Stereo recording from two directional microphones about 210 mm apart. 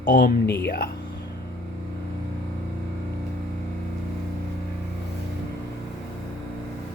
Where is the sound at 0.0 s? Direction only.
40° left (ahead or behind).